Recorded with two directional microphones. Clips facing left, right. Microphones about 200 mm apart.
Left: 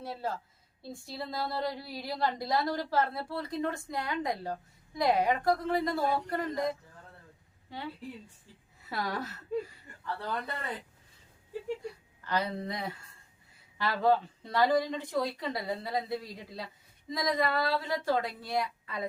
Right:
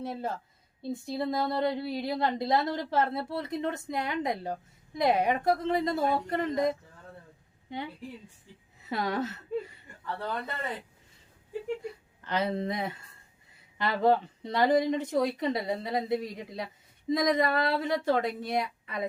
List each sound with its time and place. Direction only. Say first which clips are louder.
0.0 s a woman's voice: right 2 dB; 20° right (ahead or behind)
8.9 s a woman's voice: right 5 dB; 20° right (ahead or behind)
11.8 s a woman's voice: right 2 dB; 20° right (ahead or behind)